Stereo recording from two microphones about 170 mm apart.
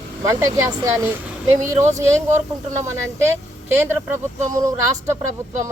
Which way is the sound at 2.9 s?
15° right (ahead or behind).